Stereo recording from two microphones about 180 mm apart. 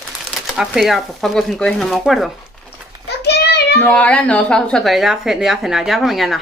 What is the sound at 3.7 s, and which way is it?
Speech, 5° left (ahead or behind).